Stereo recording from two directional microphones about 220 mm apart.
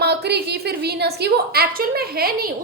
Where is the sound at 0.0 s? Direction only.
50° right (ahead or behind).